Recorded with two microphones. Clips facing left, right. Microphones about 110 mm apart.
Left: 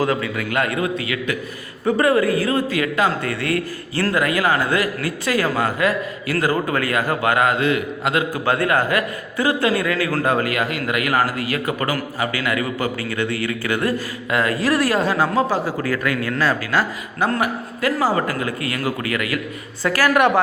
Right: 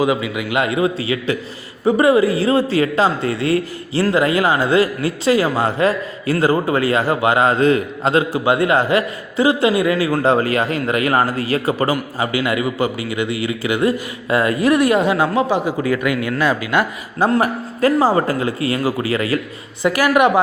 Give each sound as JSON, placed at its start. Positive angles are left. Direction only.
{"t": 0.0, "sound": "a man's voice", "side_deg": -15}
{"t": 17.4, "sound": "a man's voice", "side_deg": -35}
{"t": 19.8, "sound": "speech", "side_deg": -15}